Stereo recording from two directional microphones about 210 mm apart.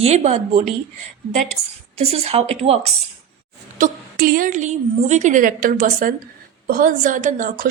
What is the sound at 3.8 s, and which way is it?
A woman's voice, 40° right (ahead or behind).